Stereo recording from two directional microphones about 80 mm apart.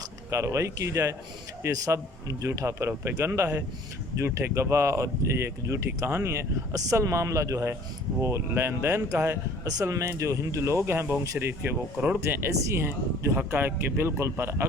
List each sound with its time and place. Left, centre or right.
0.3 s speech: right